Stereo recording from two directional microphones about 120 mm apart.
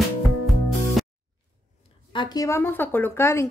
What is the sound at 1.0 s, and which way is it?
Music, centre (ahead or behind).